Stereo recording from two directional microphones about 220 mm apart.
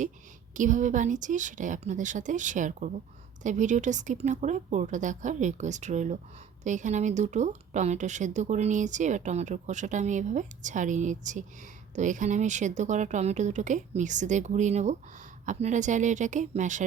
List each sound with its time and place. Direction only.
0.5 s speech: 35° right (ahead or behind)